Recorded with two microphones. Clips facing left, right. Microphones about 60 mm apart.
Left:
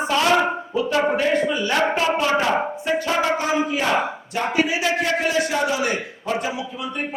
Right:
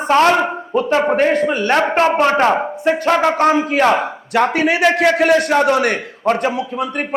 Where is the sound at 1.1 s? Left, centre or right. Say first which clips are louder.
Right 5 dB; right.